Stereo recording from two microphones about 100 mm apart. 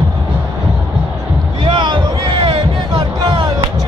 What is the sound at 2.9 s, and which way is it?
Music, 50° right (ahead or behind).